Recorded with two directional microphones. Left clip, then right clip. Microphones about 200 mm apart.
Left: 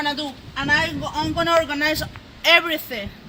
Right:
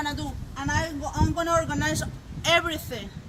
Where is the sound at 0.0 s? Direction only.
10° left (ahead or behind); by 2.8 s 30° left (ahead or behind).